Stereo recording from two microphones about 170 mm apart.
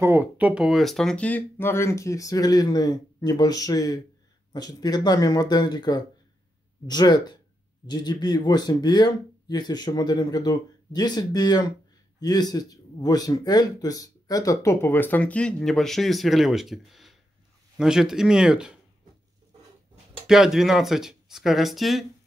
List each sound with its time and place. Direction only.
0.0 s speech: 10° right (ahead or behind)
20.2 s speech: centre (ahead or behind)